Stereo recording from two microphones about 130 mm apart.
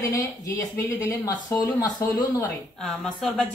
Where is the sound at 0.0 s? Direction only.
25° left (ahead or behind).